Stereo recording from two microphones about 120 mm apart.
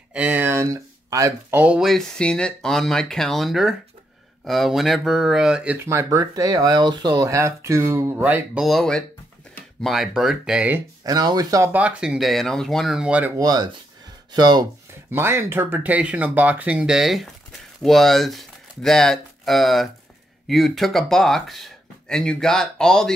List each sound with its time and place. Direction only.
0.1 s a sound: 10° right (ahead or behind)
1.5 s speech: 15° right (ahead or behind)
1.8 s speech: centre (ahead or behind)
5.9 s speech: 25° right (ahead or behind)
8.6 s speech: 5° left (ahead or behind)
11.1 s speech: 35° right (ahead or behind)
11.6 s speech: 10° right (ahead or behind)
13.4 s speech: 35° right (ahead or behind)
15.0 s speech: 20° right (ahead or behind); by 23.1 s 5° left (ahead or behind)